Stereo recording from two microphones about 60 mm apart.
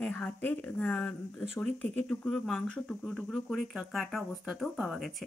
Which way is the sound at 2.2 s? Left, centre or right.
Centre.